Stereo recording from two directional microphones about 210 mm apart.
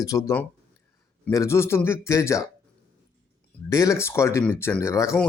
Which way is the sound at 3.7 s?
15° left (ahead or behind).